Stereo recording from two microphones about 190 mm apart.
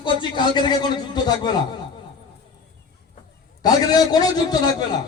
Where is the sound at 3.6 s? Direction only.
20° left (ahead or behind).